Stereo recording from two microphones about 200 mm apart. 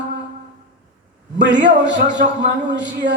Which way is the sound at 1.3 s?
60° right (ahead or behind).